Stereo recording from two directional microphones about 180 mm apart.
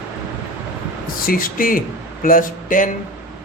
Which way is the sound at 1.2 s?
50° left (ahead or behind).